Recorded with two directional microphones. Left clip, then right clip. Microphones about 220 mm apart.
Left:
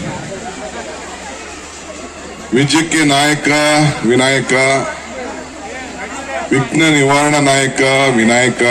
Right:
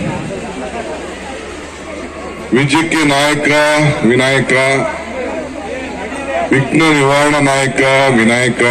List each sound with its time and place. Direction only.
2.6 s a man's voice: 50° left (ahead or behind)
6.5 s a man's voice: 50° left (ahead or behind)